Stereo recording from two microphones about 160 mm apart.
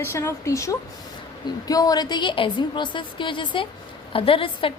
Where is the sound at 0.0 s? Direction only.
15° left (ahead or behind).